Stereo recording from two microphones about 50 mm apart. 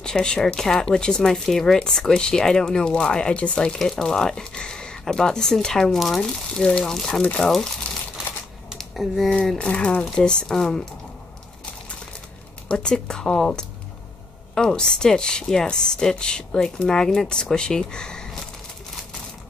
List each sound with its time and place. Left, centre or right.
0.0 s a woman's voice: centre
3.6 s a woman's voice: centre
8.7 s a sound: centre
9.6 s a woman's voice: left
12.6 s a woman's voice: centre